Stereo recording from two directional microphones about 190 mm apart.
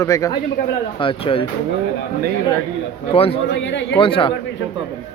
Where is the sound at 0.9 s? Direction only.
25° left (ahead or behind).